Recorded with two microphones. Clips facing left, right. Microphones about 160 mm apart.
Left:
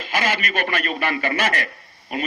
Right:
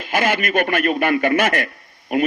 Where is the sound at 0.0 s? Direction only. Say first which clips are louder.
Right 4 dB; 50° right (ahead or behind).